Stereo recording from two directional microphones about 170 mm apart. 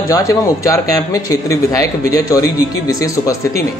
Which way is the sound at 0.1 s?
20° left (ahead or behind).